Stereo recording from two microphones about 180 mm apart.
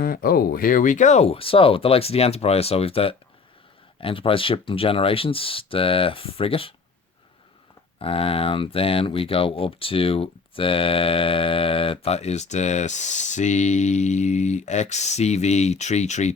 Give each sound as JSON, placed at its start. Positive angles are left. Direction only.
{"t": 0.0, "sound": "speech", "side_deg": 55}
{"t": 7.9, "sound": "speech", "side_deg": 30}